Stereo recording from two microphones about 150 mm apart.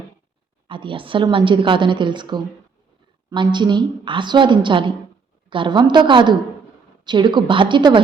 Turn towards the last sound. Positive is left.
turn(degrees=-30)  # may be behind; listen again after turning